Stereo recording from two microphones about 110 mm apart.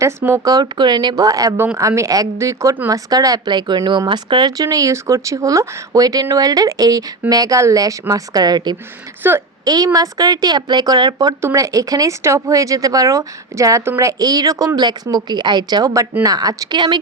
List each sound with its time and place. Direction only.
0.0 s a woman's voice: 20° right (ahead or behind)
0.4 s a woman's voice: 40° right (ahead or behind)
9.2 s a woman's voice: 20° right (ahead or behind)
9.6 s speech: 35° right (ahead or behind)
11.3 s speech: 25° right (ahead or behind); by 17.0 s 45° right (ahead or behind)